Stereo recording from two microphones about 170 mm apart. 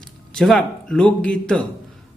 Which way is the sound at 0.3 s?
Centre (ahead or behind).